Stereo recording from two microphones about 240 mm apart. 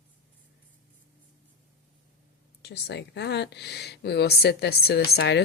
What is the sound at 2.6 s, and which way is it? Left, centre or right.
Speech, left.